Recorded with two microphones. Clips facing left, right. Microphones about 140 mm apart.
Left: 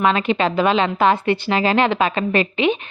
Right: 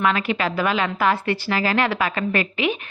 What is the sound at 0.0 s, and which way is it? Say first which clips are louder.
A woman's voice: left 4 dB; 25° left (ahead or behind).